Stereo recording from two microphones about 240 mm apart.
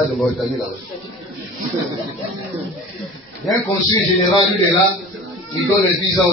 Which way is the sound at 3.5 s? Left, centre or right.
Centre.